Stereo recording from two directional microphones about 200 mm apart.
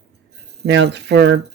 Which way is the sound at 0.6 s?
60° right (ahead or behind).